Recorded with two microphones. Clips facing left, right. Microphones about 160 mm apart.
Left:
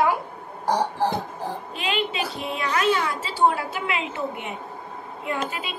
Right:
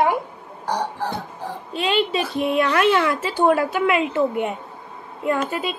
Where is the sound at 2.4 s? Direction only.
60° right (ahead or behind).